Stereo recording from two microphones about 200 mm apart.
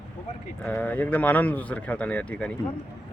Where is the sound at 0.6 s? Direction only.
10° left (ahead or behind).